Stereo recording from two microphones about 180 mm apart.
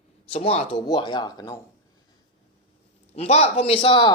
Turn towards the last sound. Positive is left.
turn(degrees=25)  # may be behind; listen again after turning